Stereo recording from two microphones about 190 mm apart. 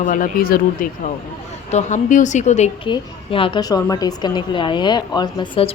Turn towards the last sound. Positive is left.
turn(degrees=25)  # may be behind; listen again after turning